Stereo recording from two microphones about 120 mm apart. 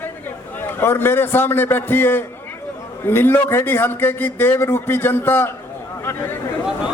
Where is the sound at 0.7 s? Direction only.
20° left (ahead or behind).